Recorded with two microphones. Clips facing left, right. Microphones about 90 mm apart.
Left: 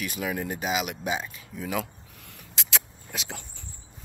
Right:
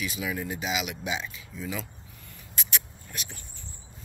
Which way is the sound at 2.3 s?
90° left.